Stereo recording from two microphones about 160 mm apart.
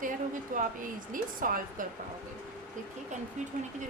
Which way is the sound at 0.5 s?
55° right (ahead or behind).